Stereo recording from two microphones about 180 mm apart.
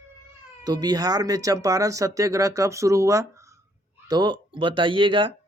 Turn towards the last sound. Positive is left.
turn(degrees=-30)  # may be behind; listen again after turning